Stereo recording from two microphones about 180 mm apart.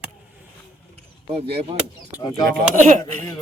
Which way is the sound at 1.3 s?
35° right (ahead or behind).